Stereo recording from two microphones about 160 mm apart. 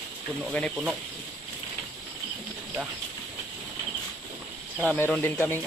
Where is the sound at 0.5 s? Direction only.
Centre (ahead or behind).